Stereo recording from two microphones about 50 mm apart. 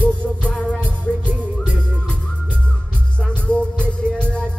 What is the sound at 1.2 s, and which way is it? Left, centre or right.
Music, right.